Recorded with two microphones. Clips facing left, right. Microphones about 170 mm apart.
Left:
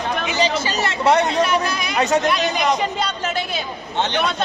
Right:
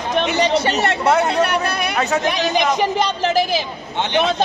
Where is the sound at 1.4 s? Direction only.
60° right (ahead or behind).